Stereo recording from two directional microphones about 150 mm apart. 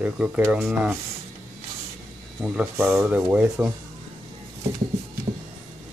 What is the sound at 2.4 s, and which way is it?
Speech, 10° right (ahead or behind).